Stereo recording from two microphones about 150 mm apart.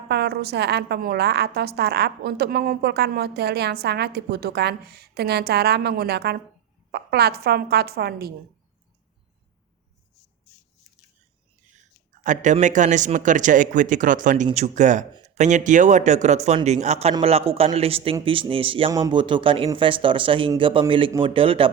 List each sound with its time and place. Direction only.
0.1 s a woman's voice: 90° right
12.2 s speech: 55° right (ahead or behind); by 18.9 s 35° right (ahead or behind)
18.9 s speech: 20° right (ahead or behind); by 21.7 s 35° right (ahead or behind)